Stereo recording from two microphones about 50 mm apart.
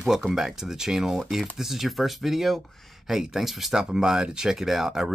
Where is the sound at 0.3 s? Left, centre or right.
Centre.